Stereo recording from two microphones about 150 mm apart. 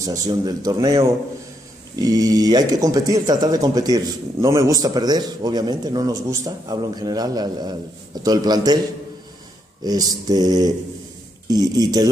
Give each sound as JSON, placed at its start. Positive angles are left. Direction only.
{"t": 0.0, "sound": "speech", "side_deg": -25}
{"t": 9.8, "sound": "speech", "side_deg": -25}